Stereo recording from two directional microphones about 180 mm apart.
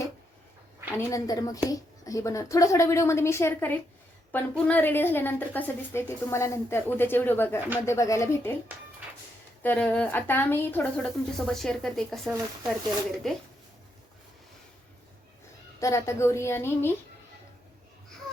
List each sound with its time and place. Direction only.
0.9 s a woman's voice: 20° left (ahead or behind)
9.6 s a woman's voice: 5° left (ahead or behind)
15.8 s a woman's voice: 15° left (ahead or behind)